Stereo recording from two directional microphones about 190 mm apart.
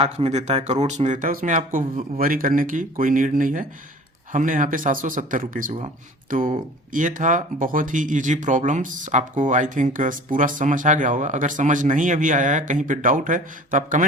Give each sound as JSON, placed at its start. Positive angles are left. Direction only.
{"t": 0.0, "sound": "speech", "side_deg": -35}